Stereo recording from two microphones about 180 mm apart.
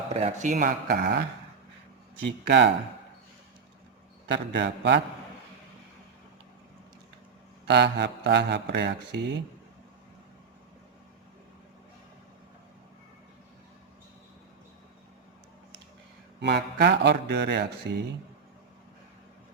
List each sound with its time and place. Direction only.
0.1 s speech: 40° right (ahead or behind); by 1.2 s 60° right (ahead or behind)
2.2 s speech: 75° right (ahead or behind)
4.5 s speech: 75° right (ahead or behind)
7.7 s speech: 70° right (ahead or behind)
16.4 s speech: 75° right (ahead or behind)